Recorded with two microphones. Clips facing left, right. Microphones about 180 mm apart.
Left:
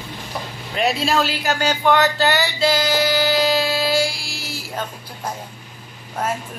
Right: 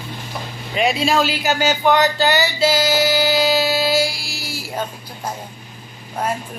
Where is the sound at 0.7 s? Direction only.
Centre (ahead or behind).